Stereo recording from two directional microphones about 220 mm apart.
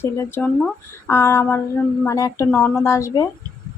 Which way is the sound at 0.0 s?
10° left (ahead or behind).